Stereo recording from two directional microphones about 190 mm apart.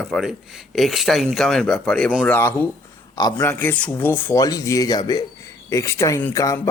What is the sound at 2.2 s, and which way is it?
Speech, 10° left (ahead or behind).